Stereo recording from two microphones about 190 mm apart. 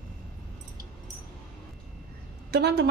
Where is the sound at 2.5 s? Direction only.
60° right (ahead or behind).